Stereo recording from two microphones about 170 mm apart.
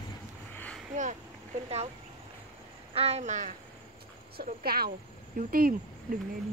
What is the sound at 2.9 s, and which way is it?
Speech, 40° right (ahead or behind).